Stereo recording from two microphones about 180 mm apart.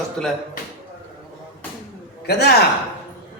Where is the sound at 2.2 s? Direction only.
65° left (ahead or behind).